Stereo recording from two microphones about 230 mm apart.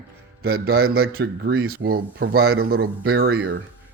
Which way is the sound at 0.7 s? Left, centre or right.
Right.